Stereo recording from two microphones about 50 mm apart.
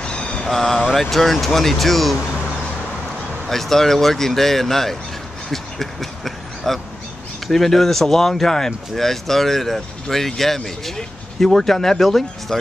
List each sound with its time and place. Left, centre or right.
0.0 s vehicle: left
0.5 s speech: centre
3.4 s speech: centre
5.5 s a sound: centre
7.4 s speech: centre